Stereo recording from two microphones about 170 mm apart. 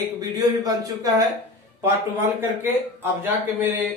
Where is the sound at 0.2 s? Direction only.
20° right (ahead or behind).